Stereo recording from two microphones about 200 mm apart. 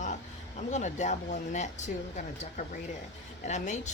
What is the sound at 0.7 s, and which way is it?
Speech, 35° left (ahead or behind).